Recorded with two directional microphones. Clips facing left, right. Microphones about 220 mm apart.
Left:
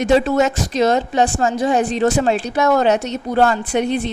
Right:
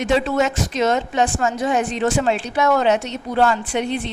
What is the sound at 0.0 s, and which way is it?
Speech, 40° left (ahead or behind).